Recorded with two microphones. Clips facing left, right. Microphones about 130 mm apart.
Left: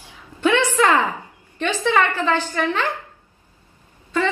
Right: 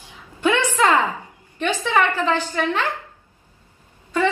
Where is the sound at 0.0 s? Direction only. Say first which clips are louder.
Left 1 dB; 15° right (ahead or behind).